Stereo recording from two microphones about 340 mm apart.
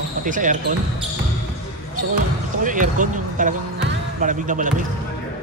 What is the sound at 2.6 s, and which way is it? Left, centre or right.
Speech, right.